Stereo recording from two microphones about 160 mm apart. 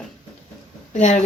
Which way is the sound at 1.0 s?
50° left (ahead or behind).